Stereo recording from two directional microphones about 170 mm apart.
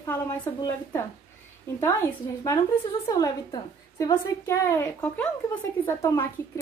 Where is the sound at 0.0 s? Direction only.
15° left (ahead or behind).